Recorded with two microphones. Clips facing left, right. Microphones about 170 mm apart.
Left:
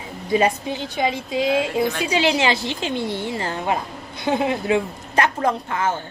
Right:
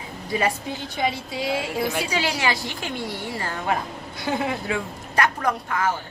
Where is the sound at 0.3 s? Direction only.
20° left (ahead or behind).